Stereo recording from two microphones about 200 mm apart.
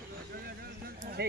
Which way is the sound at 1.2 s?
55° right (ahead or behind).